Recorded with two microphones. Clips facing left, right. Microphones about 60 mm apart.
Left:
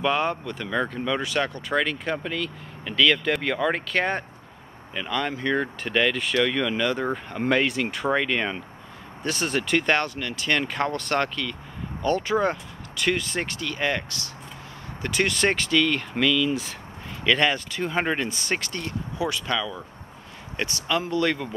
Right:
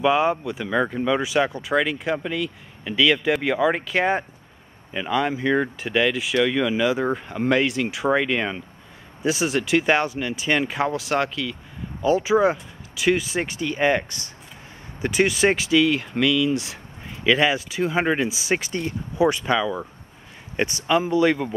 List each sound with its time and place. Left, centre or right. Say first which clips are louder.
0.0 s speech: right 5 dB; centre